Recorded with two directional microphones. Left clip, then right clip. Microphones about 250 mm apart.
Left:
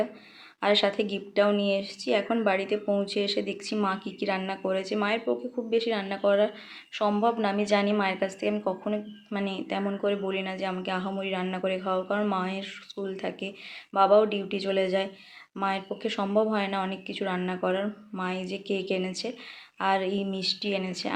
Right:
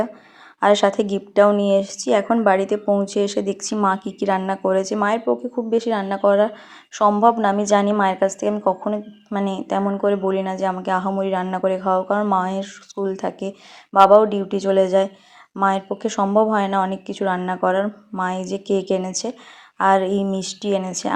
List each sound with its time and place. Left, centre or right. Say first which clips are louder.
0.6 s speech: right 8 dB; right